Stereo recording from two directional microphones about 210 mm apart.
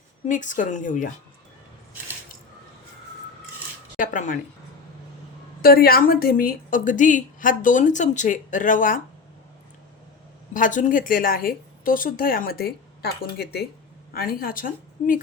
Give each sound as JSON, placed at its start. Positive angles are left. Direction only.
{"t": 0.3, "sound": "a woman's voice", "side_deg": 35}
{"t": 3.9, "sound": "speech", "side_deg": 40}
{"t": 5.6, "sound": "a woman's voice", "side_deg": 45}
{"t": 10.5, "sound": "a woman's voice", "side_deg": 40}